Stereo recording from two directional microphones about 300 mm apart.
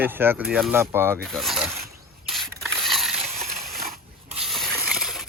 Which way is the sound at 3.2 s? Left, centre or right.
Right.